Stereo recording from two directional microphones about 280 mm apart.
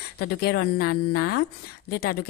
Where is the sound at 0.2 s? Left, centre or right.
Left.